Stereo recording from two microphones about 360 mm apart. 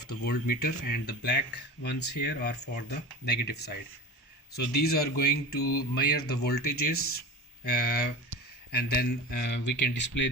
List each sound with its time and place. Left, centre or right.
0.3 s speech: left